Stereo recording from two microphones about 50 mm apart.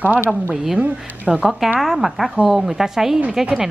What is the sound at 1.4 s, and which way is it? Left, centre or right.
A woman's voice, centre.